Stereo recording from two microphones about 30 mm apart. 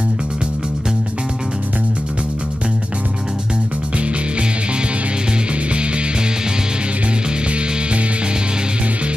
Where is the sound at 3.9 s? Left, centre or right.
Right.